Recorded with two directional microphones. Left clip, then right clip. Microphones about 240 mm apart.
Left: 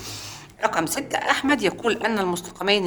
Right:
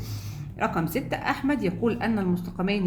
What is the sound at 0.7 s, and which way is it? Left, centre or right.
A woman's voice, left.